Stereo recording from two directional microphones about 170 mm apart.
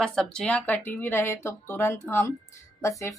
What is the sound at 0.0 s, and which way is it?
Speech, 5° left (ahead or behind).